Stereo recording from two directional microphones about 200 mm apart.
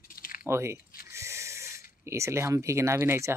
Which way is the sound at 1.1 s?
15° right (ahead or behind).